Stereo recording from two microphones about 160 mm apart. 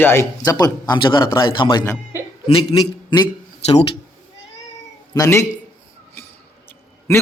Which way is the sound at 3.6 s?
40° left (ahead or behind).